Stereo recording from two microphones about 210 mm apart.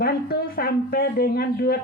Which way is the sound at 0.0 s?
50° left (ahead or behind).